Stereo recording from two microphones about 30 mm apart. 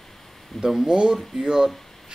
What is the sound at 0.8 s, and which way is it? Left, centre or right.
Speech, right.